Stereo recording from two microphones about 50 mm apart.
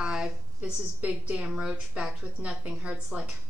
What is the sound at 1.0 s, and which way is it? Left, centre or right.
A woman's voice, right.